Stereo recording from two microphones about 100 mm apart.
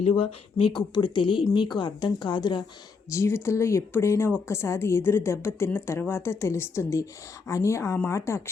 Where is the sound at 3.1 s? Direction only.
30° left (ahead or behind).